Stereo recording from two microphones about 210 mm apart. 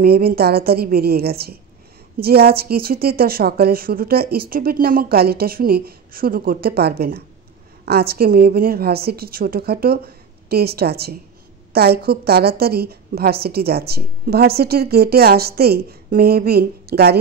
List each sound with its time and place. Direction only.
0.0 s a woman's voice: 45° right (ahead or behind)